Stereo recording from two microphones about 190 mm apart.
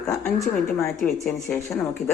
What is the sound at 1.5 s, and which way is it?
Speech, 10° left (ahead or behind).